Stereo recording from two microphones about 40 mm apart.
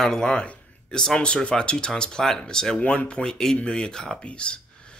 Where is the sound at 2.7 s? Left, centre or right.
Left.